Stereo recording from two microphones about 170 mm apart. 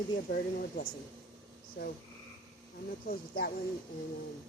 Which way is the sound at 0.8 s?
75° left (ahead or behind).